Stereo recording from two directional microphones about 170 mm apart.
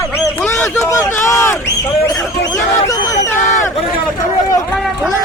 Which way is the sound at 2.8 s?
20° left (ahead or behind).